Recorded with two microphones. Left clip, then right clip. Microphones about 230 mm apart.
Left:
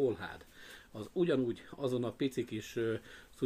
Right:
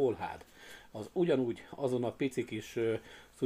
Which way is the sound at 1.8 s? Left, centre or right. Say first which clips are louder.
Right 2 dB; right.